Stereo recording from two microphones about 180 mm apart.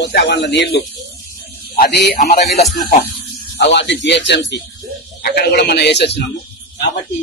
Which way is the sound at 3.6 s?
75° left (ahead or behind).